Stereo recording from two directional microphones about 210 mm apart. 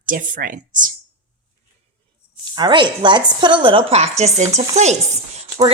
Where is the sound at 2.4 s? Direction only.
20° right (ahead or behind).